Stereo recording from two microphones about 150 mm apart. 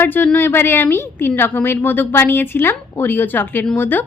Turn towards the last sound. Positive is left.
turn(degrees=15)  # may be behind; listen again after turning